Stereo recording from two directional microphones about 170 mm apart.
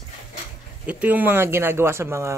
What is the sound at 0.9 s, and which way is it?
Speech, 10° right (ahead or behind).